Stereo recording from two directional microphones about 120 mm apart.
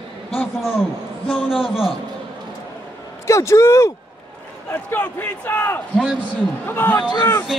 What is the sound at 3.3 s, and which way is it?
A man's voice, 25° left (ahead or behind).